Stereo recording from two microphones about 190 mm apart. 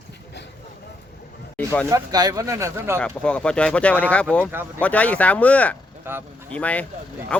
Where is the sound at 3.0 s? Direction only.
5° left (ahead or behind).